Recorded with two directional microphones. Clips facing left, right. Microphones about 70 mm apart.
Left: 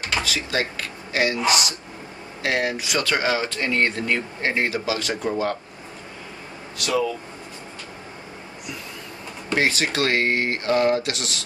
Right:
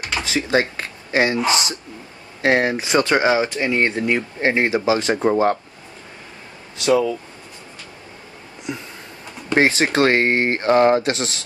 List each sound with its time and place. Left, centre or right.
0.2 s speech: right
6.8 s speech: right
8.7 s a sound: right
9.6 s speech: right